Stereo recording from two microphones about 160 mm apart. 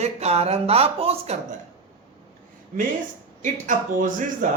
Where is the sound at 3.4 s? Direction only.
50° right (ahead or behind).